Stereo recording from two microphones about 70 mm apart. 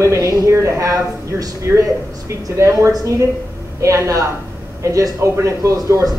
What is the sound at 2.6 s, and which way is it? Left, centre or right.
A woman's voice, right.